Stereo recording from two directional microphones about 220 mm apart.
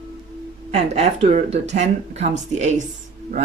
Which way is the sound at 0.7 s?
30° right (ahead or behind).